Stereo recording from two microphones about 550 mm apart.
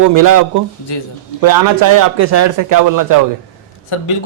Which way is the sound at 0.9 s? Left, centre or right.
Left.